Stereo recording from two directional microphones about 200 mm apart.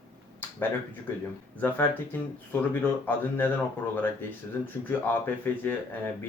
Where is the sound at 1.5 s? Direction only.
10° left (ahead or behind).